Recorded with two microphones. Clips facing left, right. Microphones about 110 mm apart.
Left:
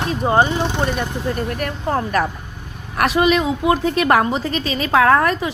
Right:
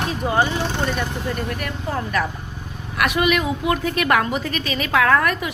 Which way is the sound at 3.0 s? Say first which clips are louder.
Left 4 dB; 30° left (ahead or behind).